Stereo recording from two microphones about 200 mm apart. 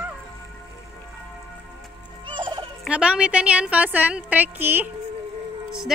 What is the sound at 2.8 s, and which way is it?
A woman's voice, 5° right (ahead or behind).